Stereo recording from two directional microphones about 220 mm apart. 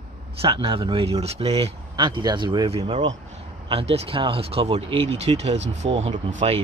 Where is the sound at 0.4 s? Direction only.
25° right (ahead or behind).